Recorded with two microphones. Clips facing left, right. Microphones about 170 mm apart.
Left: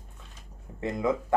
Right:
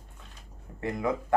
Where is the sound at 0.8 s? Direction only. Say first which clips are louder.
Left 2 dB; 20° left (ahead or behind).